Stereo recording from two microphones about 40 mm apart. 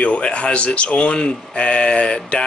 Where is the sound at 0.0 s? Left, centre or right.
Left.